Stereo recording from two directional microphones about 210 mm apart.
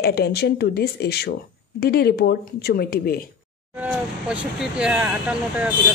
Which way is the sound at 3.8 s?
5° right (ahead or behind).